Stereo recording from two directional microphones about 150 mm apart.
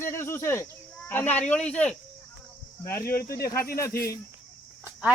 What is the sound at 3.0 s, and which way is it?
Speech, 85° left.